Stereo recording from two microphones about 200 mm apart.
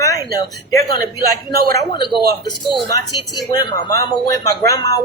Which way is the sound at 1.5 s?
50° right (ahead or behind).